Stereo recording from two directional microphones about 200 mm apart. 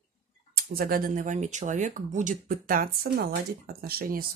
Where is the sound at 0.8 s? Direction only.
45° right (ahead or behind).